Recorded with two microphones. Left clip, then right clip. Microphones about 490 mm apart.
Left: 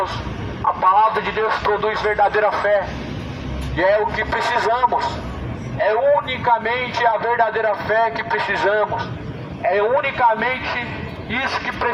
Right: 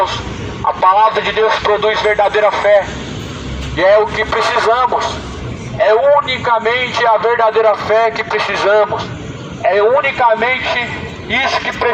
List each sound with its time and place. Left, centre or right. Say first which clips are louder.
0.8 s a man's voice: right 5 dB; left
5.8 s a man's voice: right 6 dB; left